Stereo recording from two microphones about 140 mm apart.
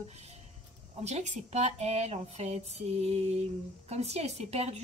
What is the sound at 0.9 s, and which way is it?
A woman's voice, 55° right (ahead or behind).